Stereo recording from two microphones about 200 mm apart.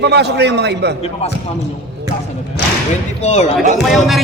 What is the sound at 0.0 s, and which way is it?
Speech, 55° right (ahead or behind).